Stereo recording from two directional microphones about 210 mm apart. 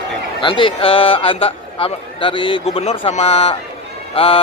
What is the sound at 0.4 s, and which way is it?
A man's voice, 25° left (ahead or behind).